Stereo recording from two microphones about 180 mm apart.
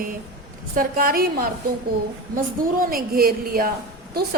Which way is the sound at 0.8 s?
50° right (ahead or behind).